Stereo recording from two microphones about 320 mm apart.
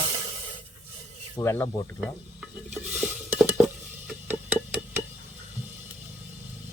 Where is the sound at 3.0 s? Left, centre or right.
Centre.